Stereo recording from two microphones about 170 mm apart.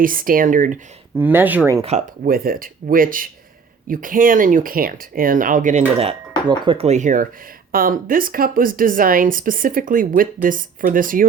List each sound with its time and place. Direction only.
0.0 s speech: 55° right (ahead or behind)
1.2 s speech: 10° right (ahead or behind)
1.8 s speech: 40° right (ahead or behind)
2.2 s speech: 60° right (ahead or behind)
6.7 s speech: 35° right (ahead or behind); by 11.3 s 55° right (ahead or behind)